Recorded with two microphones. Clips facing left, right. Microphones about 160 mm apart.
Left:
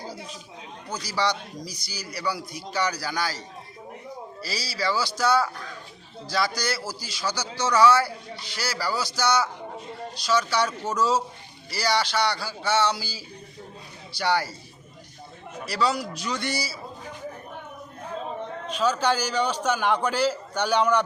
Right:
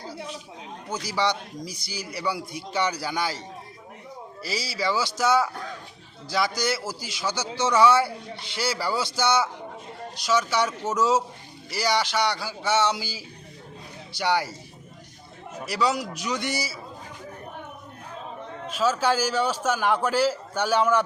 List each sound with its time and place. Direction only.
0.9 s a man's voice: 20° right (ahead or behind)
4.4 s a man's voice: 20° right (ahead or behind)
15.6 s a man's voice: 20° right (ahead or behind)
18.7 s a man's voice: 5° right (ahead or behind)